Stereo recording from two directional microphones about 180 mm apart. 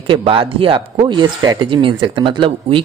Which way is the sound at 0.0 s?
30° right (ahead or behind).